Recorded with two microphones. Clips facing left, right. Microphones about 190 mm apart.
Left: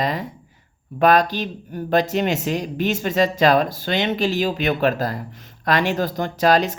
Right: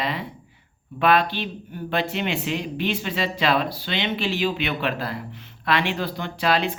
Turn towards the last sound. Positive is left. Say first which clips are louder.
# left 5 dB
turn(degrees=40)  # may be behind; listen again after turning